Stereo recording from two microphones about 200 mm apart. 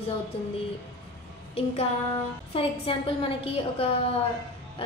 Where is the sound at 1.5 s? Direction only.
30° left (ahead or behind).